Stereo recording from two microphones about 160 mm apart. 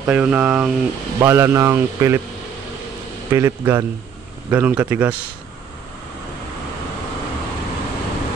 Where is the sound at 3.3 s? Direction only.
20° right (ahead or behind).